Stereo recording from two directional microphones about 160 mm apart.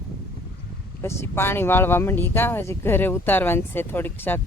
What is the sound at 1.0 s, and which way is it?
Speech, 15° left (ahead or behind).